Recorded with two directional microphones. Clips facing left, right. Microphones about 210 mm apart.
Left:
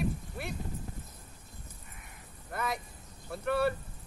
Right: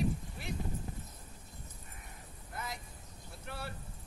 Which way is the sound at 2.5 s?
65° left (ahead or behind).